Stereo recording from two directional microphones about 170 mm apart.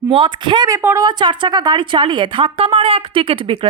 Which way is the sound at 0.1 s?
30° right (ahead or behind).